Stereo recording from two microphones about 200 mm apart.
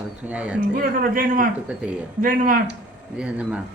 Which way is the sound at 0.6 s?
45° right (ahead or behind).